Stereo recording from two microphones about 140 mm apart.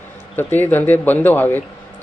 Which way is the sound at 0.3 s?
15° left (ahead or behind).